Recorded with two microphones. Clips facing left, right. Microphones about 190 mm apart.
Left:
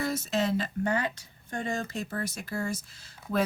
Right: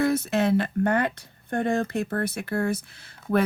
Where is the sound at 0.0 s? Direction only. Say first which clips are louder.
Right 6 dB; 60° right (ahead or behind).